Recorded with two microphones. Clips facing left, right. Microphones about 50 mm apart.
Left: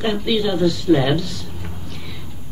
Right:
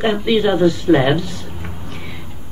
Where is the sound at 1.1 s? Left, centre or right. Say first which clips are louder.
Right 2 dB; right.